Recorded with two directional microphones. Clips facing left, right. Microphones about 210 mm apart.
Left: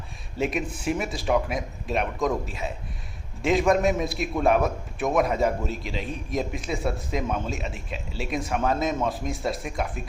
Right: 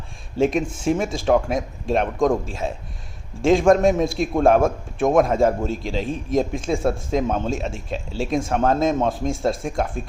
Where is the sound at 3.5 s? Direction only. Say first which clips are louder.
Right 6 dB; 45° right (ahead or behind).